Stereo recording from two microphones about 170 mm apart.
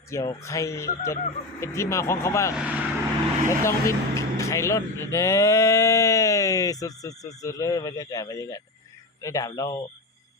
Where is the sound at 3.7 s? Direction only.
20° left (ahead or behind).